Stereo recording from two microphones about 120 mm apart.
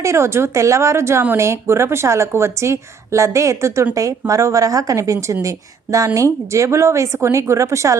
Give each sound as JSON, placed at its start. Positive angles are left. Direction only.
{"t": 0.0, "sound": "speech", "side_deg": -25}